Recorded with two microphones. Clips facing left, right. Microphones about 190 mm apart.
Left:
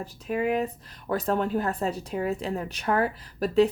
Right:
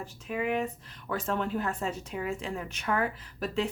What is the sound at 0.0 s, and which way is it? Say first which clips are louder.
Speech: left 5 dB; 40° left (ahead or behind).